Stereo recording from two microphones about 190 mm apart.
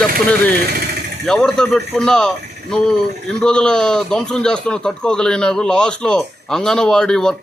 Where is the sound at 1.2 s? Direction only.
5° left (ahead or behind).